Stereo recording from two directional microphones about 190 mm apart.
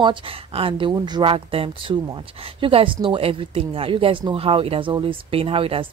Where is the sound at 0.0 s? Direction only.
25° right (ahead or behind).